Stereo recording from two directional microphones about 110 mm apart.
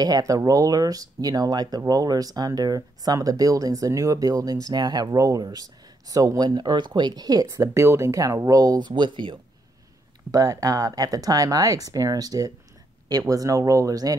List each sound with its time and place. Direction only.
0.0 s speech: 35° right (ahead or behind)
10.3 s speech: 35° right (ahead or behind)